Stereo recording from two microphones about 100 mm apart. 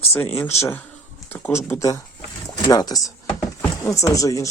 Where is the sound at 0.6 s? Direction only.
25° left (ahead or behind).